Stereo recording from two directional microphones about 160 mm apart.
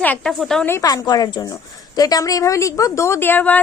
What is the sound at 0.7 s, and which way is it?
A woman's voice, 20° left (ahead or behind).